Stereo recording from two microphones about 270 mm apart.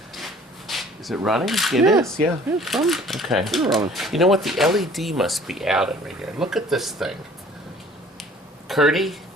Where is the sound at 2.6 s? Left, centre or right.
Centre.